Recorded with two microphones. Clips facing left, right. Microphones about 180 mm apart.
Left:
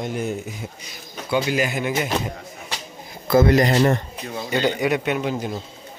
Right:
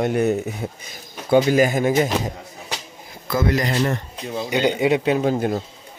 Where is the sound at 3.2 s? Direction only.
45° left (ahead or behind).